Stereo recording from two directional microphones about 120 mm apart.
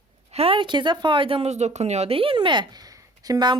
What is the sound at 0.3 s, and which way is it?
A woman's voice, 55° right (ahead or behind).